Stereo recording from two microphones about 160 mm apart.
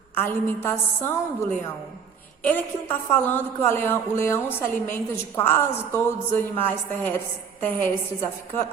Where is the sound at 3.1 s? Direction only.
10° left (ahead or behind).